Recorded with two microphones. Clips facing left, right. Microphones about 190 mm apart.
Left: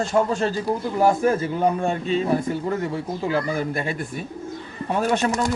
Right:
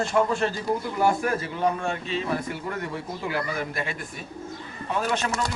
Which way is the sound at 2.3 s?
25° left (ahead or behind).